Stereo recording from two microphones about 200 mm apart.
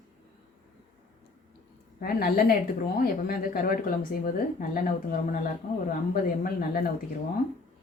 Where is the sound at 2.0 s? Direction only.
50° left (ahead or behind).